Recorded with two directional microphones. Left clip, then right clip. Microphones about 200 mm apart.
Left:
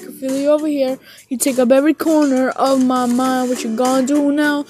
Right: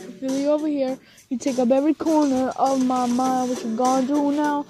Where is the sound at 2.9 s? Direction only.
50° left (ahead or behind).